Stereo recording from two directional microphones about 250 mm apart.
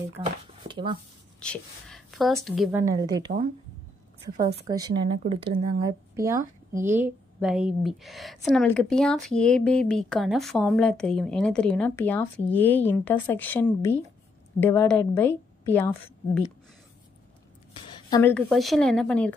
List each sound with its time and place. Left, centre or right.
0.7 s speech: centre
1.4 s a woman's voice: centre
3.3 s speech: right
4.6 s a woman's voice: centre
17.9 s a sound: centre
18.3 s a woman's voice: centre